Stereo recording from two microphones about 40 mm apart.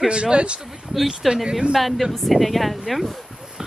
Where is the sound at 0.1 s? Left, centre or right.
Right.